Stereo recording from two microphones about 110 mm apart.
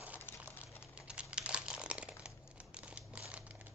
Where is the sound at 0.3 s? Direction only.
15° right (ahead or behind).